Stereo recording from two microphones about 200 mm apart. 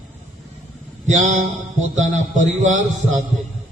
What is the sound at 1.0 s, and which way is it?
Speech, 40° right (ahead or behind).